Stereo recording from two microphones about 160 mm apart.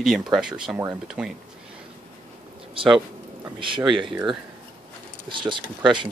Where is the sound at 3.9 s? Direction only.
30° right (ahead or behind).